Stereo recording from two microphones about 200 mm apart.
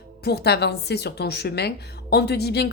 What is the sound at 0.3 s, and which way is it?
A woman's voice, 55° left (ahead or behind).